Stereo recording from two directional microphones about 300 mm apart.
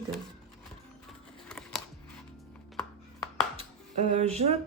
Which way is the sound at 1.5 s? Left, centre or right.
Centre.